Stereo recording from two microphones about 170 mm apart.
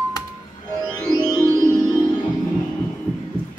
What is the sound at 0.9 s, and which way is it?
Music, 5° left (ahead or behind).